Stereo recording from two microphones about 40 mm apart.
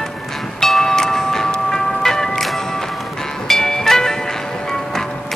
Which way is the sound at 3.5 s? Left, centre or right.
Centre.